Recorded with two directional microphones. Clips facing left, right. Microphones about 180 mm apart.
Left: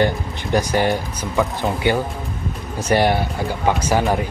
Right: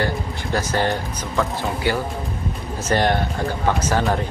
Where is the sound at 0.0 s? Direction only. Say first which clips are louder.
Left 4 dB; 15° left (ahead or behind).